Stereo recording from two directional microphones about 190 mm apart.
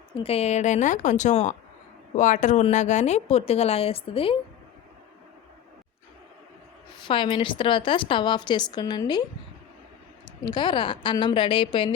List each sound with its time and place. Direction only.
0.1 s speech: 30° left (ahead or behind)
7.1 s a woman's voice: 25° left (ahead or behind)
10.4 s a woman's voice: 25° left (ahead or behind)